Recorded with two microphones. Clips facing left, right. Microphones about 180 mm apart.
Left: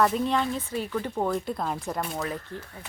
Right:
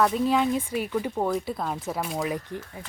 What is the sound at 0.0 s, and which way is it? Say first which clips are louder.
Speech: right 2 dB; centre (ahead or behind).